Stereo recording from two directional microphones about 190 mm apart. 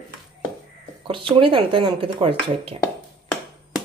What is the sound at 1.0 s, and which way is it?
Speech, 25° right (ahead or behind).